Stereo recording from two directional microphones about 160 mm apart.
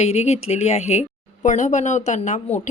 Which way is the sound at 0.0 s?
40° left (ahead or behind).